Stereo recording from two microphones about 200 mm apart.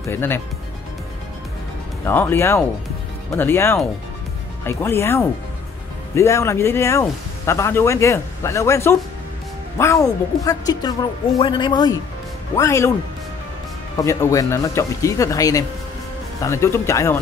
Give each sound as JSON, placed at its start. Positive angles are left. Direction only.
{"t": 0.0, "sound": "speech", "side_deg": 10}
{"t": 2.0, "sound": "speech", "side_deg": 10}
{"t": 13.9, "sound": "speech", "side_deg": 15}